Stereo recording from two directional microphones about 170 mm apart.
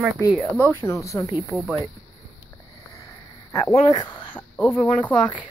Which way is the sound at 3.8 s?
25° left (ahead or behind).